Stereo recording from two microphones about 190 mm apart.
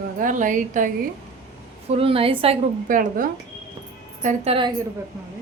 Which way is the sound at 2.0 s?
30° right (ahead or behind).